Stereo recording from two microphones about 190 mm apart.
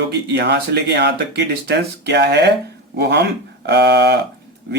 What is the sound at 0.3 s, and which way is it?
Speech, 60° right (ahead or behind).